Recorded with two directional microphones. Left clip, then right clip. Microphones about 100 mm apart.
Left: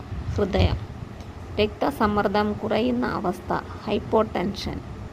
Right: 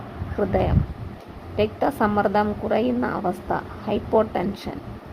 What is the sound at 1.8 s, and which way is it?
A woman's voice, 55° left (ahead or behind).